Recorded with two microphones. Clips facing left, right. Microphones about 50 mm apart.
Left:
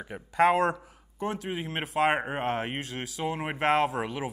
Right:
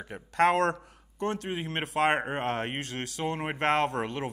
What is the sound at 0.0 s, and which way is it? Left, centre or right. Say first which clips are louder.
Speech: left 1 dB; centre.